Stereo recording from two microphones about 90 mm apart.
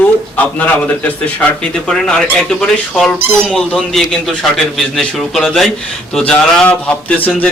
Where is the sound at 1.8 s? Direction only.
5° left (ahead or behind).